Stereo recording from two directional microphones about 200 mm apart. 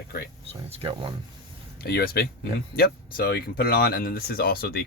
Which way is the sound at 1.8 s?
50° left (ahead or behind).